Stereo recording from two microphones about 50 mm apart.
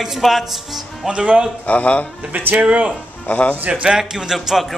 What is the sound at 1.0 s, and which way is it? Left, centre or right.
Speech, right.